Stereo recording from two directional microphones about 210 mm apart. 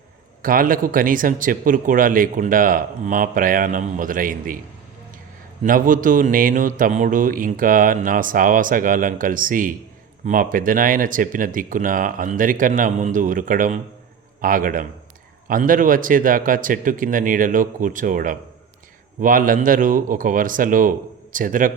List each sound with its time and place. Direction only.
0.4 s a man's voice: 40° right (ahead or behind)
5.6 s a man's voice: 40° right (ahead or behind)